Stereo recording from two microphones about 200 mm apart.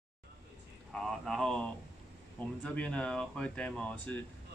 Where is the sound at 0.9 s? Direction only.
Centre (ahead or behind).